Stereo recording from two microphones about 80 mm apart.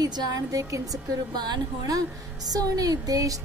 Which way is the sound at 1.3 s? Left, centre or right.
Right.